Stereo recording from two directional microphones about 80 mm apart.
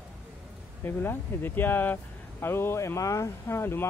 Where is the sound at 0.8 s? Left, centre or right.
Left.